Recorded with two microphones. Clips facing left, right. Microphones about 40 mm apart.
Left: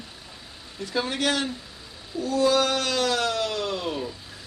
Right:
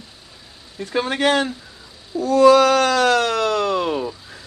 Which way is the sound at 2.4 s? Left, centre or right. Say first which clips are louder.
Right 10 dB; right.